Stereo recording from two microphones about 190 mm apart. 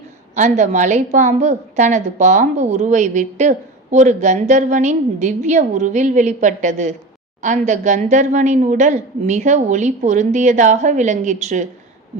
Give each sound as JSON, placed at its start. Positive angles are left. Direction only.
{"t": 0.3, "sound": "a woman's voice", "side_deg": -40}